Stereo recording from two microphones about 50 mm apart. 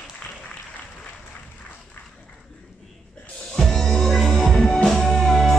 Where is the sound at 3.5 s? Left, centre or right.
Centre.